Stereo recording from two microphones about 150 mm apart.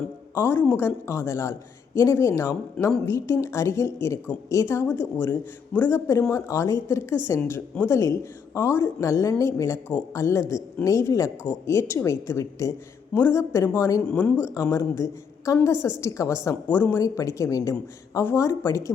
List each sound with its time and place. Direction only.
0.3 s a woman's voice: 15° left (ahead or behind)
14.0 s a woman's voice: 5° left (ahead or behind)
14.4 s a woman's voice: 20° left (ahead or behind)